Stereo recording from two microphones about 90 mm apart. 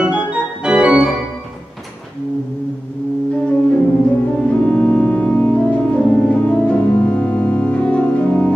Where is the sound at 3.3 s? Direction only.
10° left (ahead or behind).